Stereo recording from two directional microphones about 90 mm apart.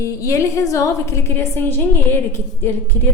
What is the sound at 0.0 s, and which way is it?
A woman's voice, 35° left (ahead or behind).